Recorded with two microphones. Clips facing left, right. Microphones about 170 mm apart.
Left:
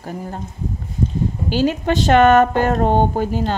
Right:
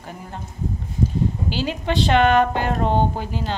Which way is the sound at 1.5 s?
45° left (ahead or behind).